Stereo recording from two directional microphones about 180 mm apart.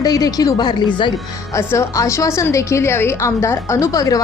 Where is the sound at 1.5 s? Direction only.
15° left (ahead or behind).